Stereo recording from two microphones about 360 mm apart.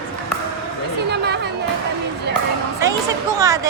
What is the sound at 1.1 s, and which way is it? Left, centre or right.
Chatter, right.